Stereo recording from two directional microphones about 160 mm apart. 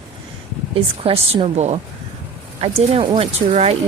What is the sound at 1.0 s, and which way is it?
Speech, 35° right (ahead or behind).